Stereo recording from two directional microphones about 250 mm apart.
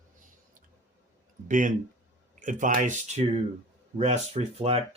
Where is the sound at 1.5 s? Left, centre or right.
Right.